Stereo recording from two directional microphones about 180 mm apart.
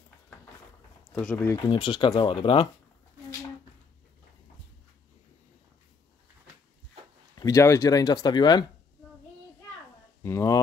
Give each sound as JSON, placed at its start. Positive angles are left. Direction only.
{"t": 1.1, "sound": "speech", "side_deg": 10}
{"t": 1.6, "sound": "speech", "side_deg": 25}
{"t": 7.3, "sound": "speech", "side_deg": 20}
{"t": 10.2, "sound": "speech", "side_deg": 15}